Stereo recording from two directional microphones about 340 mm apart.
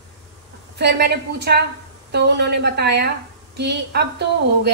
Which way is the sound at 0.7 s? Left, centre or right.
Right.